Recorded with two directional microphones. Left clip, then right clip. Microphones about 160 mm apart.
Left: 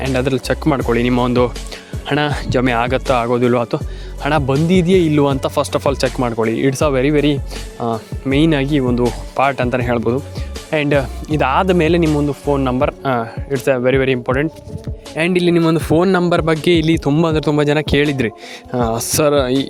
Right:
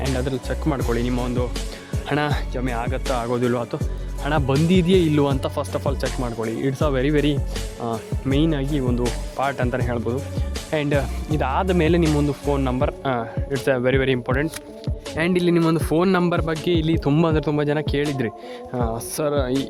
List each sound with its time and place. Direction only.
0.2 s speech: 40° left (ahead or behind)
2.0 s a man's voice: 25° left (ahead or behind)
2.5 s speech: 50° left (ahead or behind)
3.1 s a man's voice: 25° left (ahead or behind)
4.7 s speech: 10° left (ahead or behind)
5.2 s a man's voice: 25° left (ahead or behind)
8.4 s speech: 40° left (ahead or behind)
9.4 s a man's voice: 25° left (ahead or behind)
10.7 s a man's voice: 20° left (ahead or behind)
11.8 s a man's voice: 15° left (ahead or behind)